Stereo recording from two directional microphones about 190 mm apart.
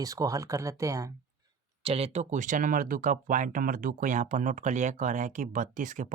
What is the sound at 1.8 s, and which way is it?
Speech, 30° right (ahead or behind).